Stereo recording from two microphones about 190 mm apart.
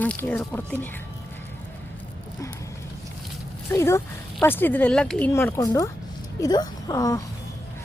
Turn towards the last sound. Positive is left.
turn(degrees=20)  # may be behind; listen again after turning